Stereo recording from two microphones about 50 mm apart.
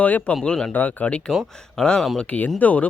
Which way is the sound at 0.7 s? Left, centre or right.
Left.